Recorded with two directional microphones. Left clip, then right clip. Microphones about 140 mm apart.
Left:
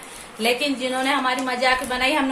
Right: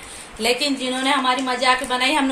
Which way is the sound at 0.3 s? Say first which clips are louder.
Right 1 dB; 35° right (ahead or behind).